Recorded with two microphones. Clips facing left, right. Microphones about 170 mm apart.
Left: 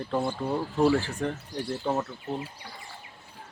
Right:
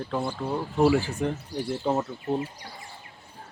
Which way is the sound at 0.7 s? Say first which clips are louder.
Right 3 dB; 10° right (ahead or behind).